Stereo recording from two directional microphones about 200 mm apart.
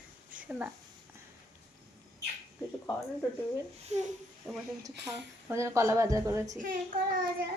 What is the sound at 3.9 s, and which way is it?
Speech, 35° right (ahead or behind).